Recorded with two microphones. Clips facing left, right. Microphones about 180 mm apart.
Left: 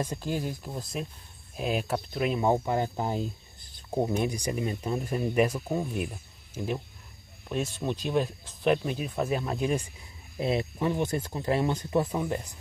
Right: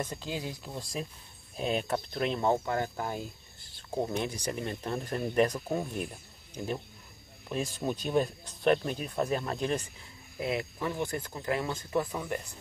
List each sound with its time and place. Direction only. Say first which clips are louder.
0.0 s speech: left 4 dB; 15° left (ahead or behind)
0.3 s speech: left 7 dB; 20° right (ahead or behind)
0.7 s speech: left 2 dB; 5° left (ahead or behind)
10.4 s speech: left 5 dB; 25° left (ahead or behind)